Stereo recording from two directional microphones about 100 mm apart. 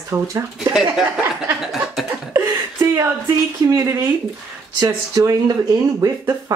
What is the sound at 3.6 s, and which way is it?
Speech, 30° right (ahead or behind).